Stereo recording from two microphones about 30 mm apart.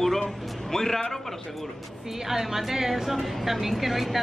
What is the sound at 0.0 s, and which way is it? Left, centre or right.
Music, centre.